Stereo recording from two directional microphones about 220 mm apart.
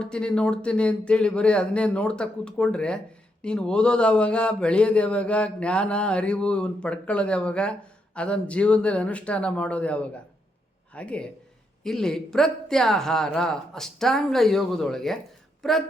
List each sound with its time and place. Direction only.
0.0 s speech: 5° left (ahead or behind)